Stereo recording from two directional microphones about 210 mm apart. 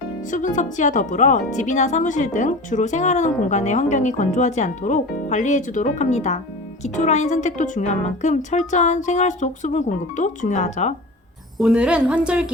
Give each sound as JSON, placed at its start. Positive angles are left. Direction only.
{"t": 0.3, "sound": "speech", "side_deg": 35}
{"t": 11.6, "sound": "a woman's voice", "side_deg": -5}